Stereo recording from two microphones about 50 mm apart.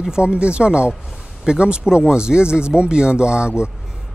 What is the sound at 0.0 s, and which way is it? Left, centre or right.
Speech, centre.